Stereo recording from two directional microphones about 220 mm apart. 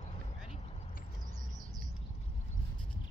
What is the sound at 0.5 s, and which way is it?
Vehicle, 30° left (ahead or behind).